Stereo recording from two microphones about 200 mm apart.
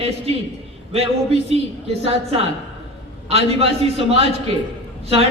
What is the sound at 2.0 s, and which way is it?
A man's voice, 30° right (ahead or behind).